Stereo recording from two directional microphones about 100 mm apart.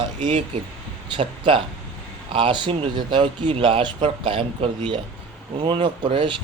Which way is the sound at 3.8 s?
50° right (ahead or behind).